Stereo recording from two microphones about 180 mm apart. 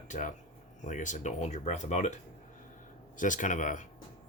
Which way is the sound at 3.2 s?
45° left (ahead or behind).